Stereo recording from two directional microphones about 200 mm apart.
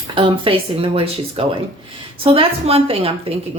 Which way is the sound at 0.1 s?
25° right (ahead or behind).